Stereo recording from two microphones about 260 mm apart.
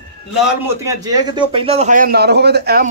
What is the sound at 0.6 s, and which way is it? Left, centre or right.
A man's voice, centre.